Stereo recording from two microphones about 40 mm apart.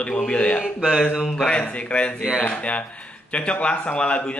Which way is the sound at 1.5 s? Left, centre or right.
Left.